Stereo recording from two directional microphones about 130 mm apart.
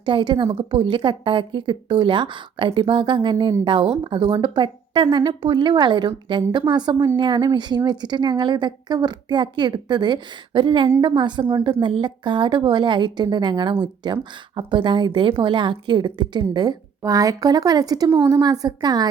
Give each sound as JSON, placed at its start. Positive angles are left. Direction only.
{"t": 0.0, "sound": "a woman's voice", "side_deg": -40}